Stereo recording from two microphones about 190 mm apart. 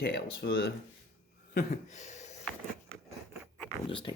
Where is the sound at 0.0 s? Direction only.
55° left (ahead or behind).